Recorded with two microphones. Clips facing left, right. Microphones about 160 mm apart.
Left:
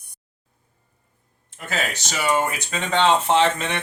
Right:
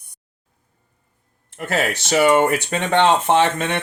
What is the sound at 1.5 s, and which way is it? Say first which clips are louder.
Speech: right 6 dB; 65° right (ahead or behind).